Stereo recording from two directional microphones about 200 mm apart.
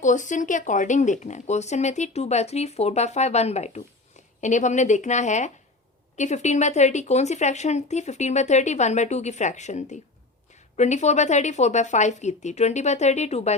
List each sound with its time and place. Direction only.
0.0 s speech: 40° left (ahead or behind)